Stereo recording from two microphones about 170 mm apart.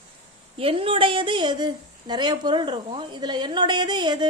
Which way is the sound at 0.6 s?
35° right (ahead or behind).